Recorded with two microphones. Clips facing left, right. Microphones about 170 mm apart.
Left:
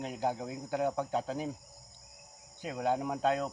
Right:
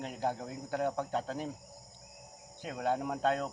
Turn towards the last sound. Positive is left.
turn(degrees=5)  # may be behind; listen again after turning